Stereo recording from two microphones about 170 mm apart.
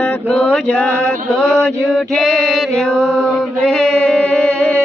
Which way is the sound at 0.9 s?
15° right (ahead or behind).